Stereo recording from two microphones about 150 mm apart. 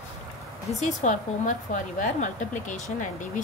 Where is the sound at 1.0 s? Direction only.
55° left (ahead or behind).